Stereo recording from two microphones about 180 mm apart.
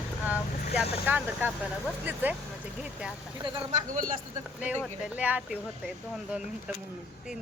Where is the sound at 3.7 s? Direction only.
45° right (ahead or behind).